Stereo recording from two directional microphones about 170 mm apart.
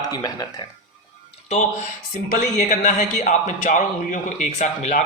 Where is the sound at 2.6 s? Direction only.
50° left (ahead or behind).